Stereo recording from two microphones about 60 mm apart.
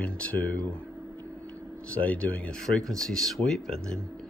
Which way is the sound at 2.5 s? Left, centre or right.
Centre.